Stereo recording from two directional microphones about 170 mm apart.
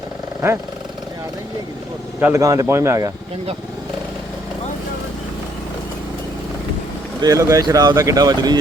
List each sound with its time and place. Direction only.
2.2 s speech: 20° right (ahead or behind)
7.2 s speech: 20° right (ahead or behind)